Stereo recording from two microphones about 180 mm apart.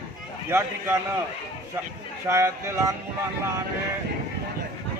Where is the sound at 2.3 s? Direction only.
15° right (ahead or behind).